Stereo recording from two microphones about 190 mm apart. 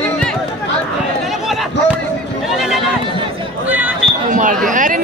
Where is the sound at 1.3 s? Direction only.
Centre (ahead or behind).